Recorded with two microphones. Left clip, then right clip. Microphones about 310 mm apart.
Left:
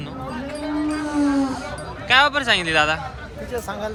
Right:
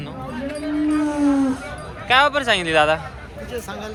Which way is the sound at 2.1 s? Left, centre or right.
Centre.